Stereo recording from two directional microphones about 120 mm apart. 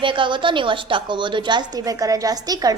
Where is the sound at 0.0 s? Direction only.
45° right (ahead or behind).